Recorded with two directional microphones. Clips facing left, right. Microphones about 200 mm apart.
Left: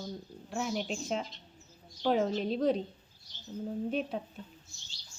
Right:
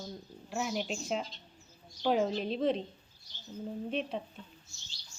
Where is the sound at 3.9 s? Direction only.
Centre (ahead or behind).